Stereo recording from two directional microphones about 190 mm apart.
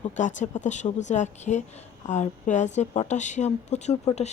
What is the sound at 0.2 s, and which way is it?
Speech, 40° left (ahead or behind).